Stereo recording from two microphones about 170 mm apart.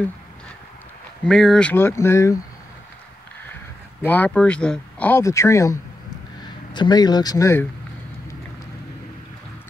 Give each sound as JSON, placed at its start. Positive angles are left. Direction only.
{"t": 1.2, "sound": "speech", "side_deg": 5}
{"t": 4.0, "sound": "speech", "side_deg": 10}